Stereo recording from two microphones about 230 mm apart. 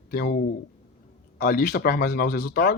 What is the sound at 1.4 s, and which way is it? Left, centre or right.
Speech, left.